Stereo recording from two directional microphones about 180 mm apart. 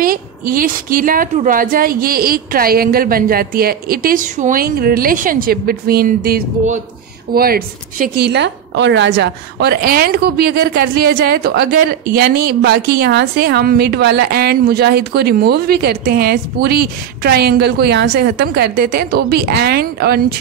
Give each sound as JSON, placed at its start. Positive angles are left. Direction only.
{"t": 0.0, "sound": "a woman's voice", "side_deg": -50}